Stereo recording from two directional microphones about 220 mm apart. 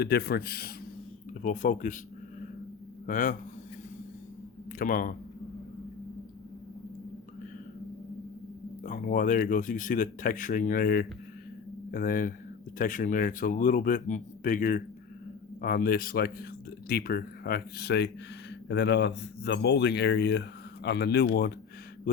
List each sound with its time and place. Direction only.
0.0 s speech: 45° left (ahead or behind)
3.1 s speech: 35° left (ahead or behind)
4.8 s speech: 40° left (ahead or behind)
8.8 s speech: 35° left (ahead or behind)